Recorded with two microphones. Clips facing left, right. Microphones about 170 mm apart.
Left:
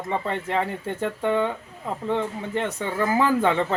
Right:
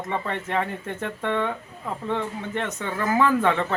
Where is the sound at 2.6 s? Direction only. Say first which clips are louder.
Left 3 dB; 30° left (ahead or behind).